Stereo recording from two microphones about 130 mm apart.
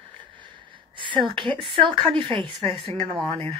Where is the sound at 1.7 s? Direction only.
40° right (ahead or behind).